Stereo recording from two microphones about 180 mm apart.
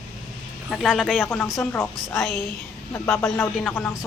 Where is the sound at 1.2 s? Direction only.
10° left (ahead or behind).